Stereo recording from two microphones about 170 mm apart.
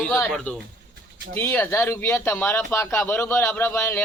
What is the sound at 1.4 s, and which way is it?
Speech, 15° left (ahead or behind).